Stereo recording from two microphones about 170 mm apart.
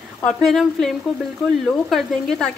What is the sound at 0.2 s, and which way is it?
Speech, centre (ahead or behind).